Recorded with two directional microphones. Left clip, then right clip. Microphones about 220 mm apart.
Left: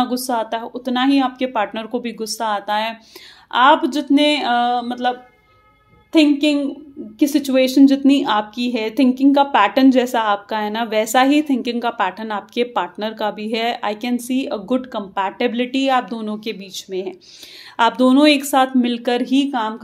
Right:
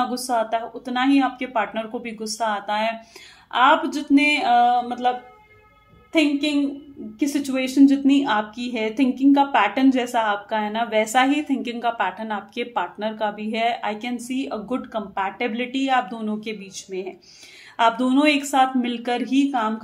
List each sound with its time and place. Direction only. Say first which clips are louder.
0.3 s speech: left 1 dB; 40° left (ahead or behind)
7.2 s speech: left 8 dB; 40° left (ahead or behind)